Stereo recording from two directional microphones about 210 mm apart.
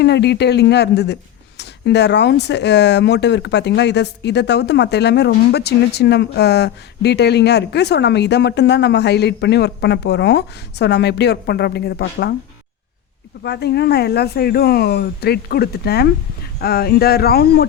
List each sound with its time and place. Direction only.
0.0 s speech: 55° left (ahead or behind)
13.4 s speech: 50° left (ahead or behind)